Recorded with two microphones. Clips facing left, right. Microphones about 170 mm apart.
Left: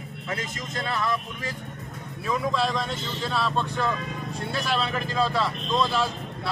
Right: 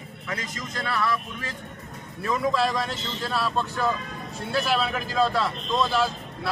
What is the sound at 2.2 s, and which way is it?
Speech, centre (ahead or behind).